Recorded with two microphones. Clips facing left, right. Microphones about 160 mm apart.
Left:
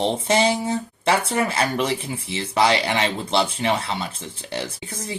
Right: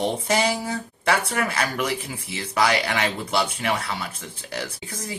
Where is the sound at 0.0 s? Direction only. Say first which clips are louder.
Left 3 dB; 25° left (ahead or behind).